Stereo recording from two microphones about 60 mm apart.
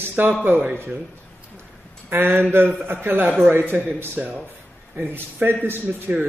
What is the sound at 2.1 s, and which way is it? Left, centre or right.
A man's voice, right.